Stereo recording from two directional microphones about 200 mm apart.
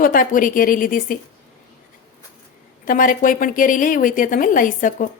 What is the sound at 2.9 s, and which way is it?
A woman's voice, 40° left (ahead or behind).